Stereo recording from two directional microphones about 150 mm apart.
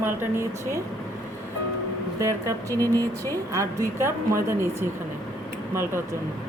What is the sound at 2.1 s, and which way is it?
Speech, 20° right (ahead or behind).